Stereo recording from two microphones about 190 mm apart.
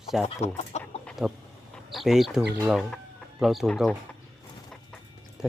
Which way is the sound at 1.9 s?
Centre (ahead or behind).